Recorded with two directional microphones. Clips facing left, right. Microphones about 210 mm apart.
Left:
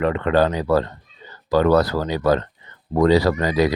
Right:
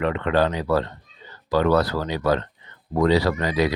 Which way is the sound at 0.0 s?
40° left (ahead or behind).